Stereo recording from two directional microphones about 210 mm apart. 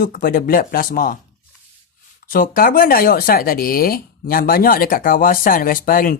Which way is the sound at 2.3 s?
40° left (ahead or behind).